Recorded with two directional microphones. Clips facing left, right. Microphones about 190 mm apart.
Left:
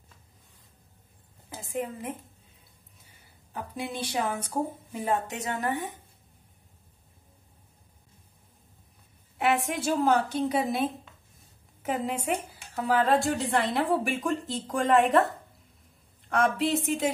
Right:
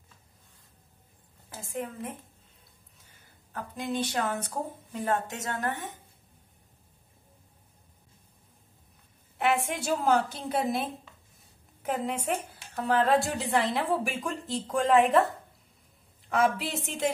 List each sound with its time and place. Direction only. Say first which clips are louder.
1.5 s a woman's voice: left 3 dB; 15° left (ahead or behind)
3.5 s a woman's voice: right 2 dB; 10° left (ahead or behind)
9.4 s a woman's voice: left 1 dB; centre (ahead or behind)
16.3 s a woman's voice: left 2 dB; centre (ahead or behind)